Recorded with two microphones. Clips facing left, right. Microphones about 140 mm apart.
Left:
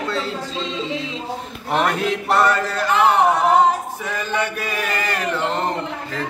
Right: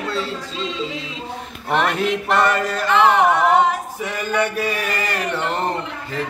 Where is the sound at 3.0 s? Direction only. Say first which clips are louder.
Even; 35° left (ahead or behind).